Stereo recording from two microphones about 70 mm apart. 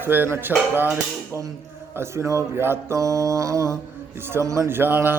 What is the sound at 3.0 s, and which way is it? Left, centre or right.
Mantra, right.